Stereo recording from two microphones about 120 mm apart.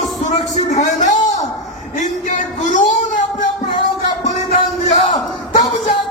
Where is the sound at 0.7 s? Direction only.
90° left.